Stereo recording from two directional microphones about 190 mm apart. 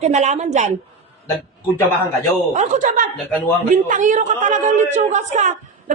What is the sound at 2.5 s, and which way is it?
A woman's voice, 40° right (ahead or behind).